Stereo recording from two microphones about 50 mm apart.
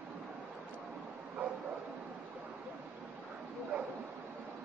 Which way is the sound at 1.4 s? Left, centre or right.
Right.